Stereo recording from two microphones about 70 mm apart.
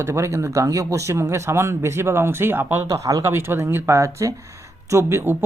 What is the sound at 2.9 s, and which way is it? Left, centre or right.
Speech, right.